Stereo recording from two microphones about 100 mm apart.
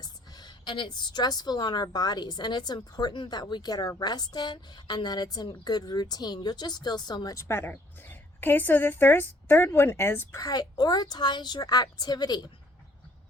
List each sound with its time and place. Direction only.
0.0 s a woman's voice: 40° left (ahead or behind); by 10.4 s 25° left (ahead or behind)
10.4 s a woman's voice: 40° left (ahead or behind)